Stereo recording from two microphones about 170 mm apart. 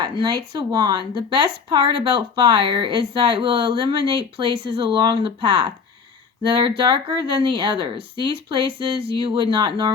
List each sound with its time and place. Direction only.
0.0 s speech: 25° right (ahead or behind)